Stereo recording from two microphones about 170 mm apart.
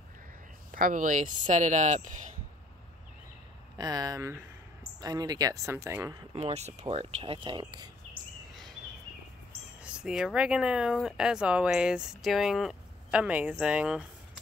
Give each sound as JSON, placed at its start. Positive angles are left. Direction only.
{"t": 0.7, "sound": "speech", "side_deg": -50}
{"t": 3.7, "sound": "speech", "side_deg": -25}
{"t": 6.3, "sound": "speech", "side_deg": -40}
{"t": 9.8, "sound": "speech", "side_deg": -5}